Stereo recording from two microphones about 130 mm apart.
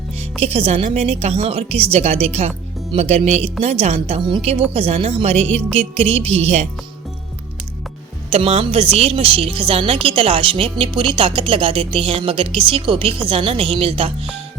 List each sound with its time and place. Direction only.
0.4 s a woman's voice: 50° right (ahead or behind)
8.3 s a woman's voice: 50° right (ahead or behind)